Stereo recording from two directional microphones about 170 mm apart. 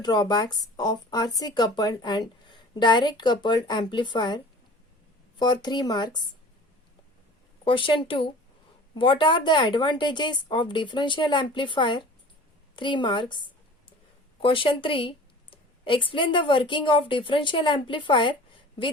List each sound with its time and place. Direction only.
0.0 s speech: 25° left (ahead or behind)
5.4 s speech: 25° left (ahead or behind)
7.6 s speech: 30° left (ahead or behind)
14.4 s speech: 30° left (ahead or behind)